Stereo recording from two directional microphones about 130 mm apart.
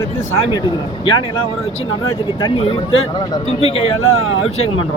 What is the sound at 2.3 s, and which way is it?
Speech, 40° left (ahead or behind).